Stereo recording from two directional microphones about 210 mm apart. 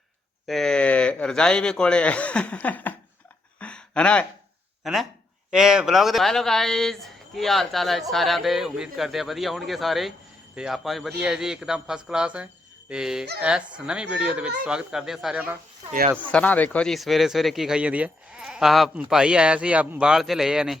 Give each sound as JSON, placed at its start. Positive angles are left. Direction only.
{"t": 0.4, "sound": "speech", "side_deg": 0}
{"t": 3.6, "sound": "a sound", "side_deg": 5}
{"t": 4.8, "sound": "speech", "side_deg": 0}
{"t": 16.1, "sound": "speech", "side_deg": 5}